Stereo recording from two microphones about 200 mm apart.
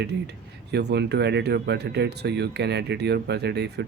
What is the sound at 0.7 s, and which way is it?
Speech, 55° right (ahead or behind).